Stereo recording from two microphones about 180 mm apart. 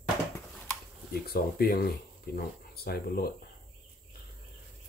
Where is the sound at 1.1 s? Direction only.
60° left (ahead or behind).